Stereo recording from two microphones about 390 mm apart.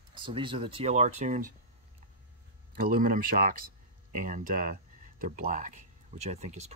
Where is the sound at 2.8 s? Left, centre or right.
Right.